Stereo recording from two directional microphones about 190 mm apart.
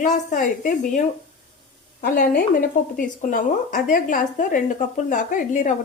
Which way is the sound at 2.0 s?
50° left (ahead or behind).